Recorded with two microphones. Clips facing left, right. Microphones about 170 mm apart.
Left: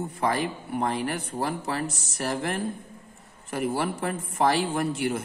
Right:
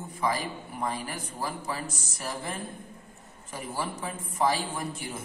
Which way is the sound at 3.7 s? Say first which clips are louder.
Left 6 dB; 65° left (ahead or behind).